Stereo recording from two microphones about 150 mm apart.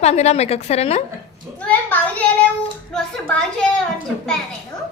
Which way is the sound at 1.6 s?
10° left (ahead or behind).